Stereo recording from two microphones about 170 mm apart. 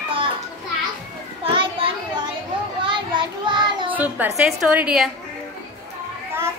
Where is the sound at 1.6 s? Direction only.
30° right (ahead or behind).